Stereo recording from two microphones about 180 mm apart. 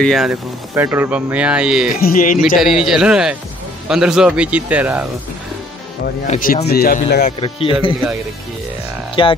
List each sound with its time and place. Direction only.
0.0 s a man's voice: centre (ahead or behind)
1.9 s speech: 55° left (ahead or behind)
2.4 s a man's voice: centre (ahead or behind)
6.3 s speech: 50° left (ahead or behind)
7.2 s speech: 30° left (ahead or behind)
9.2 s speech: 25° left (ahead or behind)